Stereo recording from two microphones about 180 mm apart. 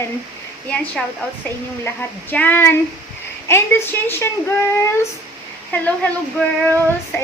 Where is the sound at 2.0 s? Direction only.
10° left (ahead or behind).